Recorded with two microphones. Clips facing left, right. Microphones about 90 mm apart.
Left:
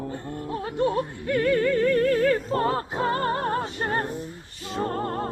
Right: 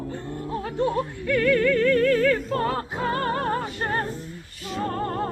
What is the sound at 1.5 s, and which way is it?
Music, 25° left (ahead or behind).